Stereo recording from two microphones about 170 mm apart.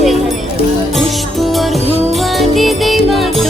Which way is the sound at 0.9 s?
Centre (ahead or behind).